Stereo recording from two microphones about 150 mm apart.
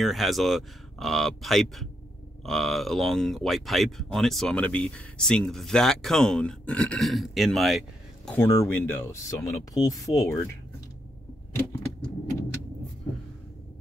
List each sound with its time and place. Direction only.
0.0 s speech: centre (ahead or behind)
8.3 s speech: 20° left (ahead or behind)